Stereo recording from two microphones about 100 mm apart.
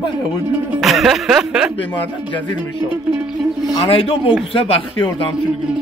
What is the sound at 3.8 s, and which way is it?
Speech, 75° left (ahead or behind).